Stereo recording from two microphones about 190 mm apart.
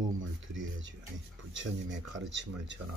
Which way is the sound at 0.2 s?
85° right.